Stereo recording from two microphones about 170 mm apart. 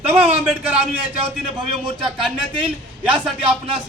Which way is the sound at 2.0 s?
5° right (ahead or behind).